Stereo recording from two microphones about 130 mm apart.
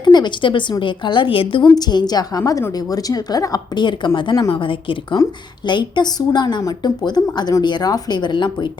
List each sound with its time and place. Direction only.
0.0 s a woman's voice: 35° left (ahead or behind)